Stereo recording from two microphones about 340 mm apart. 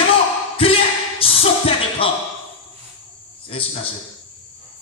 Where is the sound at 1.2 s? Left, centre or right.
Centre.